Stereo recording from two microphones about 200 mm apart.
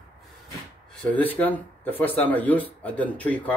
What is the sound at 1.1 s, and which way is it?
Speech, 10° left (ahead or behind).